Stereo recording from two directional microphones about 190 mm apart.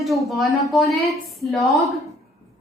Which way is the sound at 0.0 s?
Centre (ahead or behind).